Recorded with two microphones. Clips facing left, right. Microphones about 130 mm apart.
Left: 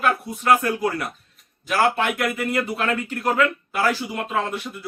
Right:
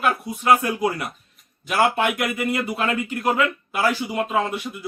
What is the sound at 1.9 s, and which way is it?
A man's voice, 10° right (ahead or behind).